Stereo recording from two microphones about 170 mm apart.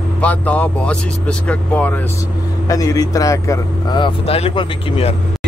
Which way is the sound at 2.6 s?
20° left (ahead or behind).